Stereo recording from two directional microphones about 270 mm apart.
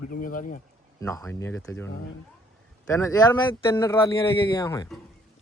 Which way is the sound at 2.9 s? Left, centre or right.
Centre.